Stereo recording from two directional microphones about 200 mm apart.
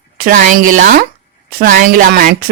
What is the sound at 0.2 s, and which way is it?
Speech, 45° right (ahead or behind).